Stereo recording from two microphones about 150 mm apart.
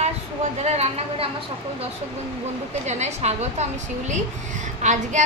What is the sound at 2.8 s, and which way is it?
A woman's voice, 50° right (ahead or behind).